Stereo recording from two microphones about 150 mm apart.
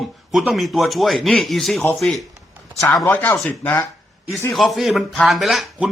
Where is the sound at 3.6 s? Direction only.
15° left (ahead or behind).